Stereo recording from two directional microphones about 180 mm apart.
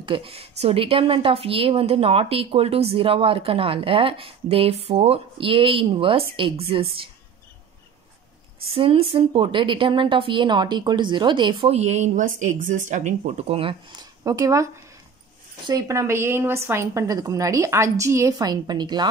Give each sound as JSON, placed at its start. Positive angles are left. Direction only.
{"t": 0.0, "sound": "a woman's voice", "side_deg": -30}
{"t": 8.7, "sound": "a woman's voice", "side_deg": -30}